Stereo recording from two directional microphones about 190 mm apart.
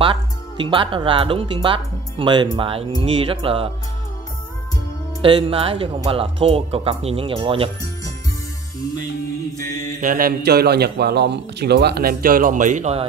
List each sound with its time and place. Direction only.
0.0 s speech: 25° right (ahead or behind)
5.2 s speech: 25° right (ahead or behind)
9.6 s mantra: 15° left (ahead or behind)
10.0 s a man's voice: 50° right (ahead or behind)